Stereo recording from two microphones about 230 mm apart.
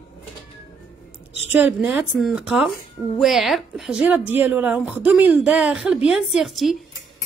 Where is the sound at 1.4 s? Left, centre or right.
Centre.